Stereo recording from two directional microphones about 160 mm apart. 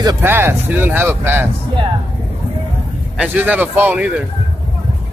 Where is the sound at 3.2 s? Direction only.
10° right (ahead or behind).